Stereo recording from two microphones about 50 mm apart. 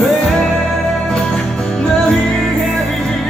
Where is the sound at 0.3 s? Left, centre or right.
Centre.